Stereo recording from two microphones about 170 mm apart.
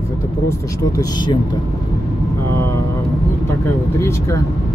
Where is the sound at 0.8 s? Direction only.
20° left (ahead or behind).